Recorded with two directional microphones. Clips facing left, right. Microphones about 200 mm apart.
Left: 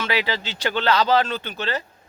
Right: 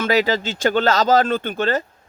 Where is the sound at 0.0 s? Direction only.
45° right (ahead or behind).